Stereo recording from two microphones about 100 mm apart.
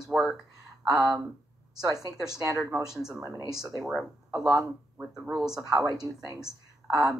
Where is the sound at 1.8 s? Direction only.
40° right (ahead or behind).